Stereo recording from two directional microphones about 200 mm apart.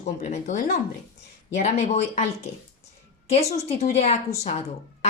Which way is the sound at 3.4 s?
30° left (ahead or behind).